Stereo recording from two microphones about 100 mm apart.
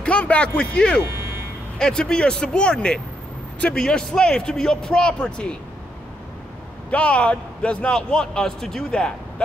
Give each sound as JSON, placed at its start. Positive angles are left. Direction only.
{"t": 0.0, "sound": "a man's voice", "side_deg": 15}
{"t": 1.0, "sound": "vehicle", "side_deg": -25}
{"t": 1.8, "sound": "a man's voice", "side_deg": 5}
{"t": 6.9, "sound": "a man's voice", "side_deg": 10}